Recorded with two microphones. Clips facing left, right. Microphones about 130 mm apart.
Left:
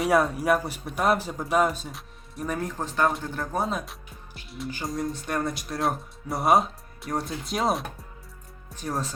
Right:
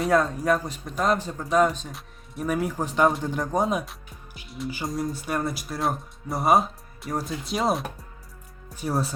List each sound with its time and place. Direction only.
0.0 s speech: 10° left (ahead or behind); by 3.8 s 15° right (ahead or behind)
4.4 s speech: centre (ahead or behind)